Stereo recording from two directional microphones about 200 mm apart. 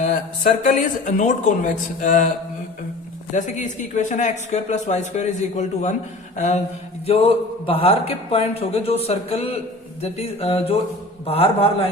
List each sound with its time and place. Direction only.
0.0 s speech: 40° left (ahead or behind)
3.3 s a man's voice: 40° left (ahead or behind)